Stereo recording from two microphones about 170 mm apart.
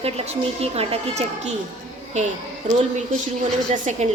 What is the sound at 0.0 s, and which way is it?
A woman's voice, 35° right (ahead or behind).